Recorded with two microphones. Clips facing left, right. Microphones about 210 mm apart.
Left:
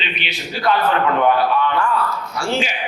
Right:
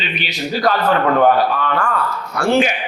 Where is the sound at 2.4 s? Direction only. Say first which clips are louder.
Right 7 dB; 60° right (ahead or behind).